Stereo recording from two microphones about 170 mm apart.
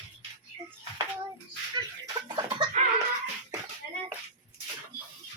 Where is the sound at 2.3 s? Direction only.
25° right (ahead or behind).